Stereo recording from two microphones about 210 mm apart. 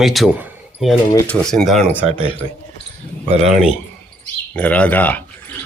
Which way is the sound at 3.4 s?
5° right (ahead or behind).